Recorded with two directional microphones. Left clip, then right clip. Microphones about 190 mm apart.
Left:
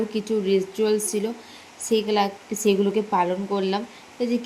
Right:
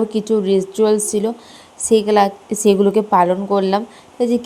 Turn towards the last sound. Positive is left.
turn(degrees=-40)  # may be behind; listen again after turning